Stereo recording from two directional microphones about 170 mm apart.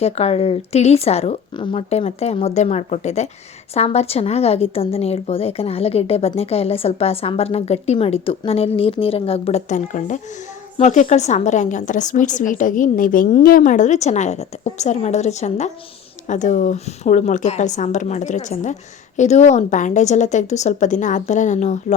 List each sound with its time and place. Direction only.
0.0 s a woman's voice: 35° left (ahead or behind)